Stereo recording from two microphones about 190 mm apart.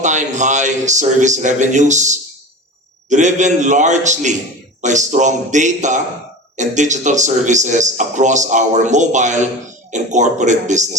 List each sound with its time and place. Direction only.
0.0 s speech: 40° right (ahead or behind)